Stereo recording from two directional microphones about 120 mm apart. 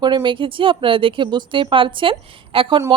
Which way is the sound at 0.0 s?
40° right (ahead or behind).